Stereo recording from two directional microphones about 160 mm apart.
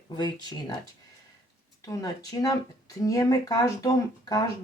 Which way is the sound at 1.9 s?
20° left (ahead or behind).